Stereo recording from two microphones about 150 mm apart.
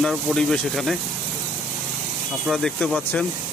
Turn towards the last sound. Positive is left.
turn(degrees=5)  # may be behind; listen again after turning